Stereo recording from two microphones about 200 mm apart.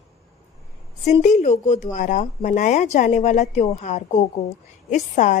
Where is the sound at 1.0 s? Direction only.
35° left (ahead or behind).